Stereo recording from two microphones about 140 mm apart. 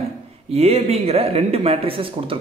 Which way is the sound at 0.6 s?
50° right (ahead or behind).